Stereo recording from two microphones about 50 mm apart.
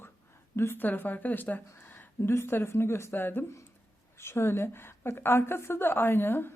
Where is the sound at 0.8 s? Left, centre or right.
Left.